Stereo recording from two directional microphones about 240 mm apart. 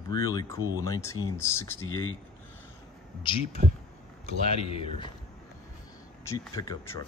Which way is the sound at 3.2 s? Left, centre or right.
Left.